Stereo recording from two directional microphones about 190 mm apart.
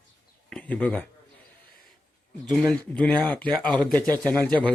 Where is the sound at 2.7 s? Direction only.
5° left (ahead or behind).